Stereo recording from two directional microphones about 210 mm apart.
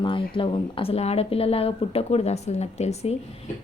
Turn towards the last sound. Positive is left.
turn(degrees=30)  # may be behind; listen again after turning